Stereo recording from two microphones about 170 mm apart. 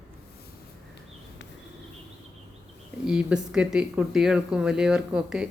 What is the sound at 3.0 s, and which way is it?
Speech, 5° right (ahead or behind).